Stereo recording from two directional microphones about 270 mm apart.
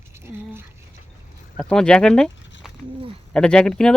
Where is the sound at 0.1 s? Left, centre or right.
Centre.